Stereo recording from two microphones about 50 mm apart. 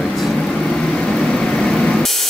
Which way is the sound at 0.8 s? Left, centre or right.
Centre.